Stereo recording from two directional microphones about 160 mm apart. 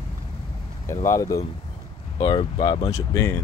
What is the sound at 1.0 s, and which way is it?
Speech, 20° left (ahead or behind).